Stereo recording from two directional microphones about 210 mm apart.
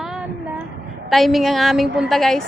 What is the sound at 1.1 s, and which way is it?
A woman's voice, centre (ahead or behind).